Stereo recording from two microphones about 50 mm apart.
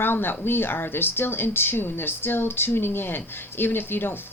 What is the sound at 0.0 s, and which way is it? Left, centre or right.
Speech, left.